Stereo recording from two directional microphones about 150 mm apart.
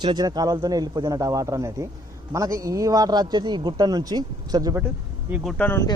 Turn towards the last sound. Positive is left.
turn(degrees=15)  # may be behind; listen again after turning